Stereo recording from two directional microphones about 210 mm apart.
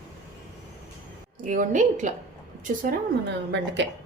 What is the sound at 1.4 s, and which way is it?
Speech, 40° right (ahead or behind).